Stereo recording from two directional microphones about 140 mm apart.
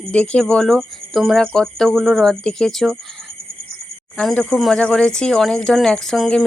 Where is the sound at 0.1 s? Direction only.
5° left (ahead or behind).